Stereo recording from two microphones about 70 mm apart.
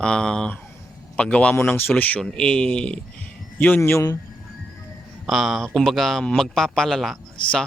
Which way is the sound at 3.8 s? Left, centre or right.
Left.